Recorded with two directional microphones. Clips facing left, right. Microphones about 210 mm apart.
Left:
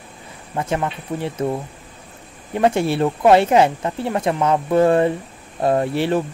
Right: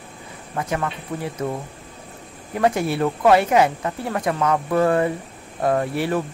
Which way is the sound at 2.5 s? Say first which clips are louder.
Left 3 dB; 25° left (ahead or behind).